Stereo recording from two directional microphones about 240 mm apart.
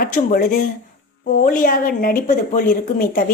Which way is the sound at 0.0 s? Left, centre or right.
Left.